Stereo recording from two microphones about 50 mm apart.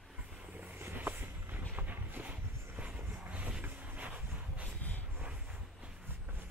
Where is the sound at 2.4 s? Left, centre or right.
Right.